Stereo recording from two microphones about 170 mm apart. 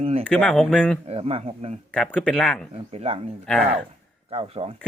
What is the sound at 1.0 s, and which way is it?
Speech, 35° right (ahead or behind).